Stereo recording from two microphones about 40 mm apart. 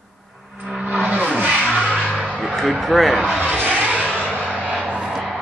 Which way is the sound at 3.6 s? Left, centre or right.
Right.